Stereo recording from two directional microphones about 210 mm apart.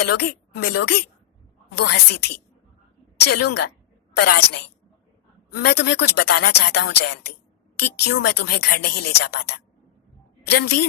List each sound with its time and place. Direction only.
0.0 s speech: 50° left (ahead or behind)
10.5 s speech: 50° left (ahead or behind)